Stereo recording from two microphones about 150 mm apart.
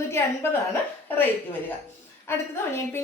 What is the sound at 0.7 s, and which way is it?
Speech, 15° left (ahead or behind).